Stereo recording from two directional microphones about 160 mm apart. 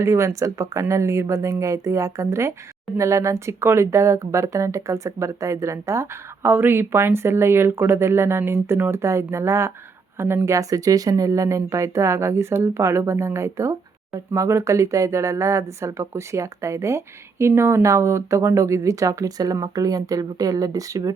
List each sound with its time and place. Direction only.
0.0 s speech: 20° right (ahead or behind)